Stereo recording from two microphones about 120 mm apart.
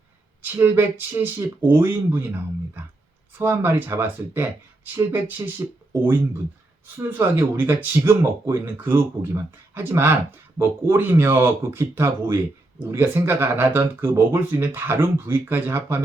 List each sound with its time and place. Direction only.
0.4 s speech: 20° right (ahead or behind)